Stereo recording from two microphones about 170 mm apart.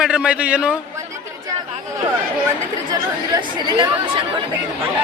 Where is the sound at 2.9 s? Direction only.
25° right (ahead or behind).